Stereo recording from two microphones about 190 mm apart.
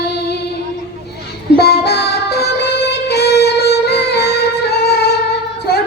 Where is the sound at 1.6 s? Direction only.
60° left (ahead or behind).